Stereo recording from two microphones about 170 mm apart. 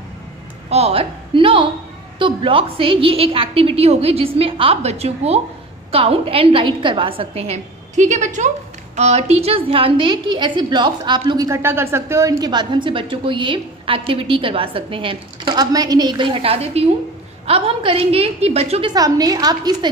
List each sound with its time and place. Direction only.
0.7 s a woman's voice: 35° right (ahead or behind)